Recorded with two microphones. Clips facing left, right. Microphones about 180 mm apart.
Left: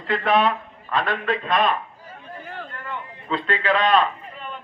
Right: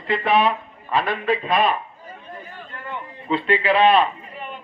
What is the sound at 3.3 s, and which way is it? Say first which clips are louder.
Speech: right 3 dB; 10° right (ahead or behind).